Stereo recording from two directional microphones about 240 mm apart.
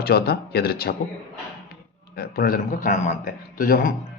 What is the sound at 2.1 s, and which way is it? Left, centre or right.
Speech, left.